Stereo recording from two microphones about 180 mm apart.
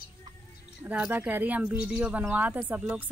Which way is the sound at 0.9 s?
10° right (ahead or behind).